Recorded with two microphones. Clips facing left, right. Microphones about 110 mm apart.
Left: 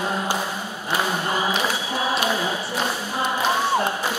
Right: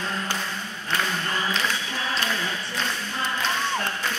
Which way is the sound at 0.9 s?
20° left (ahead or behind).